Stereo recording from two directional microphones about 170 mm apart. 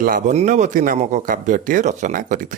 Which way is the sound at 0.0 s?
55° right (ahead or behind).